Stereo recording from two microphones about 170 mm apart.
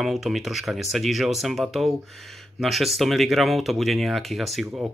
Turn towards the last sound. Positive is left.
turn(degrees=0)  # may be behind; listen again after turning